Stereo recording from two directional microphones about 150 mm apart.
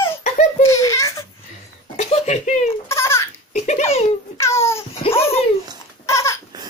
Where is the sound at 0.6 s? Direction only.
20° left (ahead or behind).